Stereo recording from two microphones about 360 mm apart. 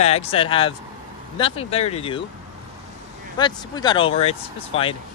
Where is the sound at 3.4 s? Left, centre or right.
Centre.